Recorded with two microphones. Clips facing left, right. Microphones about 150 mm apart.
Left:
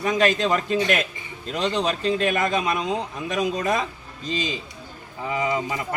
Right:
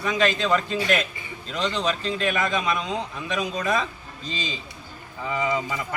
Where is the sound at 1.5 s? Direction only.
45° left (ahead or behind).